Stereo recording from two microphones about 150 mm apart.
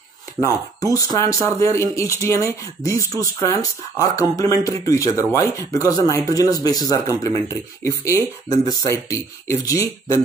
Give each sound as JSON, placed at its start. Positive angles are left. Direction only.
{"t": 0.4, "sound": "speech", "side_deg": 25}